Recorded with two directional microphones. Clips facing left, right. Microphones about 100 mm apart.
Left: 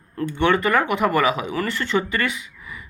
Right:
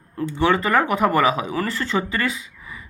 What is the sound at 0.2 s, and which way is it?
Speech, 30° right (ahead or behind).